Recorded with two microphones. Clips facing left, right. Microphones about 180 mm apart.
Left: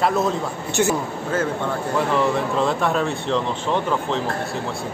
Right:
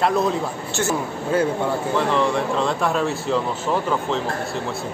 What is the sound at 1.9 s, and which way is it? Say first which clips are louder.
Speech: left 1 dB; 5° left (ahead or behind).